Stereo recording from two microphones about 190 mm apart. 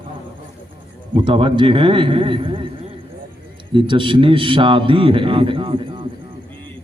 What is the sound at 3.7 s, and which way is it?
A man's voice, 25° right (ahead or behind).